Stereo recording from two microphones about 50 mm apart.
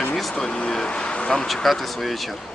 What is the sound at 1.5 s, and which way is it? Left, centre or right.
Speech, centre.